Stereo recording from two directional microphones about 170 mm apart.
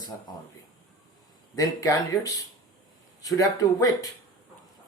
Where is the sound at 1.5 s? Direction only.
20° left (ahead or behind).